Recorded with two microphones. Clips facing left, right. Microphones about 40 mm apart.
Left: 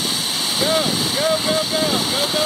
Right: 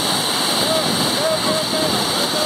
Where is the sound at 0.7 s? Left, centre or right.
Centre.